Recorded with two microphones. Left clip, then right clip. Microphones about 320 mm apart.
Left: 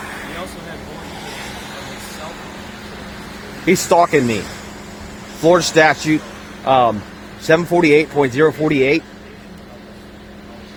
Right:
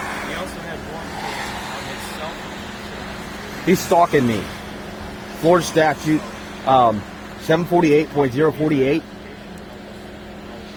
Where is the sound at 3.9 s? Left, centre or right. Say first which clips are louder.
Left 2 dB; left.